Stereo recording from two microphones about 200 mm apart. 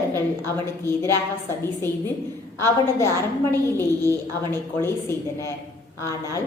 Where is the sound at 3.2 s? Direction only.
10° left (ahead or behind).